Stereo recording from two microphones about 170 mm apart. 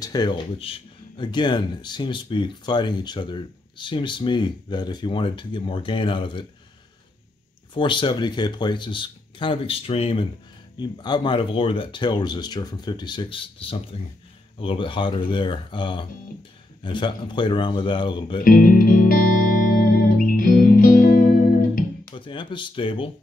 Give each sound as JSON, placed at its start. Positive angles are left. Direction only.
{"t": 0.0, "sound": "speech", "side_deg": 25}
{"t": 7.7, "sound": "speech", "side_deg": 30}
{"t": 18.4, "sound": "music", "side_deg": 55}
{"t": 22.1, "sound": "speech", "side_deg": 30}